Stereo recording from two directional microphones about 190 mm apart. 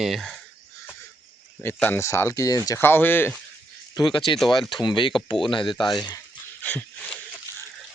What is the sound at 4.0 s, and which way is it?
Speech, 25° left (ahead or behind).